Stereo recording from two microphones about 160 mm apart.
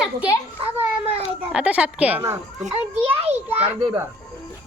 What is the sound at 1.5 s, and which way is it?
Speech, 5° right (ahead or behind).